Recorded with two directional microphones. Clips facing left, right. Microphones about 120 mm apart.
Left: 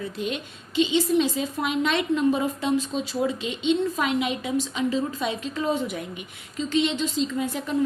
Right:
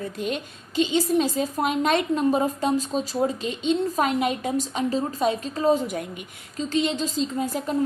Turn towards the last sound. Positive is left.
turn(degrees=-40)  # may be behind; listen again after turning